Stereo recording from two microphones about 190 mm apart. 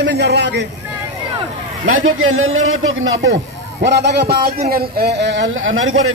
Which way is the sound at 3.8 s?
65° right (ahead or behind).